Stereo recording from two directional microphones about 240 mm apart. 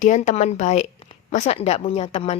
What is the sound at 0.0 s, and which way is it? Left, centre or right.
A woman's voice, left.